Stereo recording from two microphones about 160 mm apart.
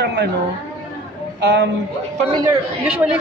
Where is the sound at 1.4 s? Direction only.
90° right.